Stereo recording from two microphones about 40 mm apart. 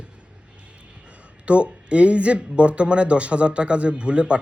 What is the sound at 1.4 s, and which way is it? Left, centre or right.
Speech, right.